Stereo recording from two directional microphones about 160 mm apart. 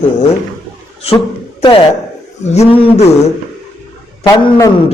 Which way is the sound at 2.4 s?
40° left (ahead or behind).